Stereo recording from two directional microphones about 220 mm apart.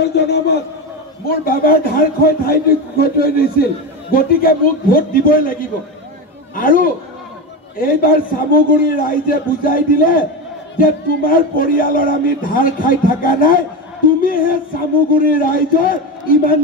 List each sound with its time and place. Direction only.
0.0 s a man's voice: 50° left (ahead or behind)
6.5 s a man's voice: 40° left (ahead or behind)